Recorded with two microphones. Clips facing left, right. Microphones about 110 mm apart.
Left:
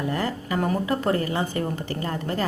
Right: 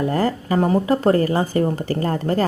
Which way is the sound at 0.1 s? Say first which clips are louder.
Right 6 dB; 40° right (ahead or behind).